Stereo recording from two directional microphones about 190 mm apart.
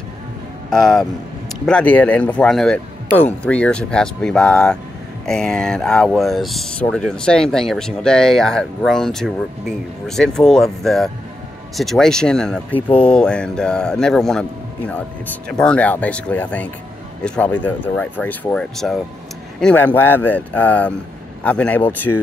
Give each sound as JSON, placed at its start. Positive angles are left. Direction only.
{"t": 0.7, "sound": "speech", "side_deg": 5}
{"t": 15.6, "sound": "speech", "side_deg": 5}